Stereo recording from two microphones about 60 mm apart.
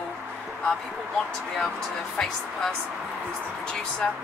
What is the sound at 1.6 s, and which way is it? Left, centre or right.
Speech, centre.